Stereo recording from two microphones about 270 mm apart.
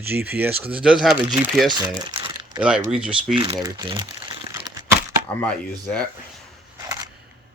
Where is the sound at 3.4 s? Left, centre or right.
Centre.